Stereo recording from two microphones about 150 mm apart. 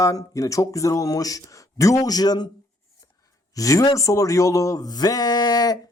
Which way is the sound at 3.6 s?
20° left (ahead or behind).